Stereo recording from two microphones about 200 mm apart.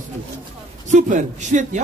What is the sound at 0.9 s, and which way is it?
Speech, 35° right (ahead or behind).